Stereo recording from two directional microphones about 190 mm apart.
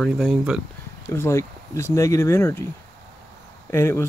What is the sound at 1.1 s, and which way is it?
Speech, 15° left (ahead or behind).